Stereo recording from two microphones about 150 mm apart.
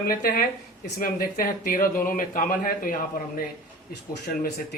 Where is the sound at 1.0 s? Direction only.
70° left (ahead or behind).